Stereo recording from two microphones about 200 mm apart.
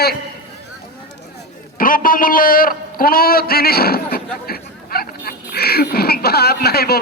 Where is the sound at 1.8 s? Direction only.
45° left (ahead or behind).